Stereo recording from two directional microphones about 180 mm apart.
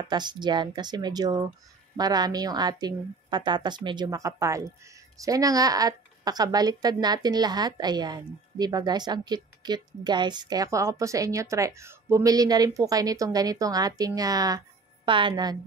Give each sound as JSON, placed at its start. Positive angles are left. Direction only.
{"t": 0.1, "sound": "a woman's voice", "side_deg": -25}